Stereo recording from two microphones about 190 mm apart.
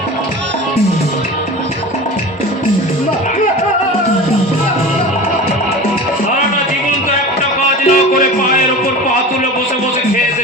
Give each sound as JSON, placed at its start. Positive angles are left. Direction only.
{"t": 7.9, "sound": "music", "side_deg": 45}